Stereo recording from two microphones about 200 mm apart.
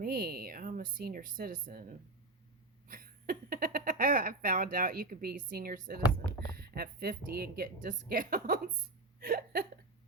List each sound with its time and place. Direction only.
0.0 s speech: 50° right (ahead or behind)